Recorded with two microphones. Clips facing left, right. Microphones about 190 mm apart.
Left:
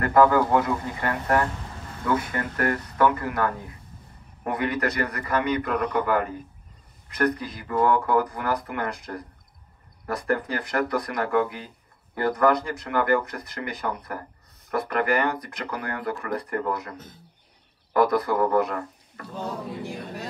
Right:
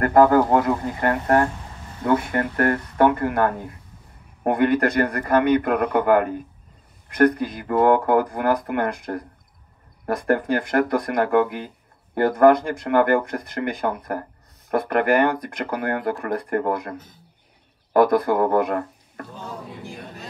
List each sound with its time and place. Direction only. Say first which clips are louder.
0.0 s speech: right 3 dB; 45° right (ahead or behind)